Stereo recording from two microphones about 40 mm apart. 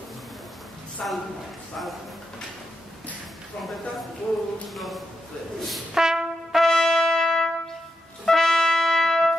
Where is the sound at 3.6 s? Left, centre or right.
Centre.